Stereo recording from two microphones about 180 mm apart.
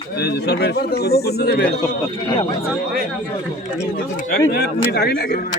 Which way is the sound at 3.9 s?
55° left (ahead or behind).